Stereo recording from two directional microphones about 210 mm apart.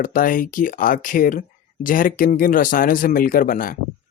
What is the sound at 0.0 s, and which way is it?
Speech, 40° left (ahead or behind).